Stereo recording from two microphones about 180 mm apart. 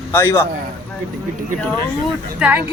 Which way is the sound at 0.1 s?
15° left (ahead or behind).